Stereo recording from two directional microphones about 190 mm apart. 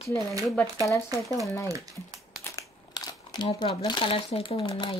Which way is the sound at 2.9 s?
20° left (ahead or behind).